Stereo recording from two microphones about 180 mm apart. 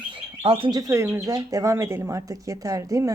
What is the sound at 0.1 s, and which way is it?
Speech, 30° right (ahead or behind).